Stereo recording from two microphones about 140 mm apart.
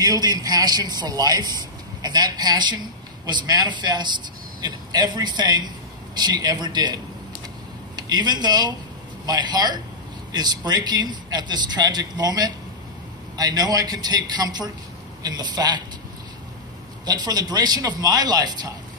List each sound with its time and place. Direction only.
0.0 s a man's voice: 30° right (ahead or behind)
17.0 s a man's voice: 30° right (ahead or behind)